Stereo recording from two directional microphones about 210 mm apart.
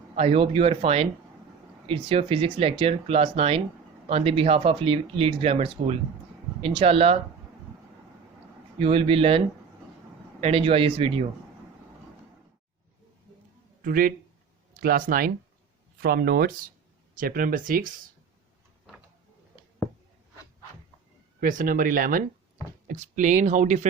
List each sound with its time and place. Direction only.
0.2 s speech: 30° right (ahead or behind)
8.8 s speech: 25° right (ahead or behind)
10.4 s speech: 25° right (ahead or behind)
13.8 s speech: 45° right (ahead or behind)
21.4 s speech: 40° right (ahead or behind)